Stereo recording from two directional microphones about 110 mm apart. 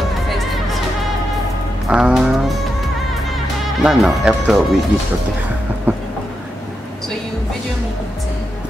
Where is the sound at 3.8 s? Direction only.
Centre (ahead or behind).